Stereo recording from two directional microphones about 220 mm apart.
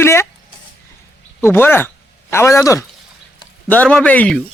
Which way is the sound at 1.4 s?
10° left (ahead or behind).